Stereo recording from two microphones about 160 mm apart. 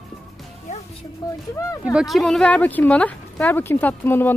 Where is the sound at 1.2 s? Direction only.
20° left (ahead or behind).